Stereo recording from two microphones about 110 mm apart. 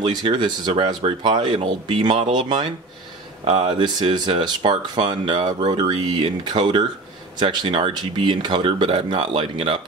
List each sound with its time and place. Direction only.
0.0 s speech: 45° right (ahead or behind)